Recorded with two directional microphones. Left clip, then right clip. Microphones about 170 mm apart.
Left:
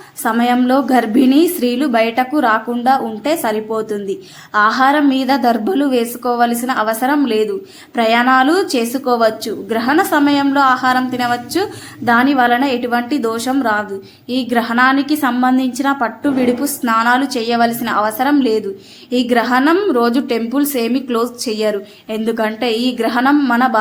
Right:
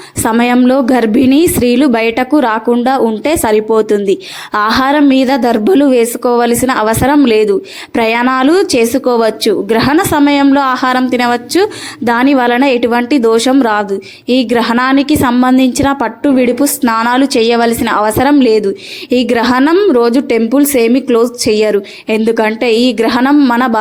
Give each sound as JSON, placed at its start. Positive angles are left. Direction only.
{"t": 0.2, "sound": "a woman's voice", "side_deg": -40}
{"t": 23.3, "sound": "speech", "side_deg": -25}